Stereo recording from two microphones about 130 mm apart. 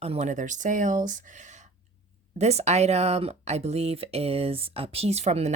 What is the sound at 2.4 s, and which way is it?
Speech, 55° right (ahead or behind).